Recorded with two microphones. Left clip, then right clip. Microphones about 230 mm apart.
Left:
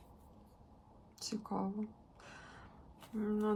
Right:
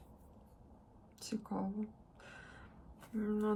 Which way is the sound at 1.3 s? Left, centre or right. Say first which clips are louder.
Left 1 dB; centre.